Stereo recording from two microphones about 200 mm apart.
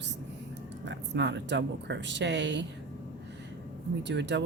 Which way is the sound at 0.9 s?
60° right (ahead or behind).